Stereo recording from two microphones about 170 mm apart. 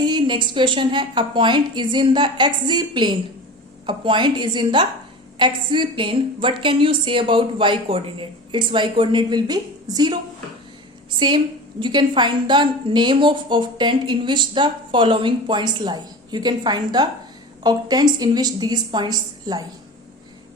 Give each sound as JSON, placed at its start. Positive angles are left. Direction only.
{"t": 0.0, "sound": "a woman's voice", "side_deg": -25}
{"t": 11.8, "sound": "a woman's voice", "side_deg": -25}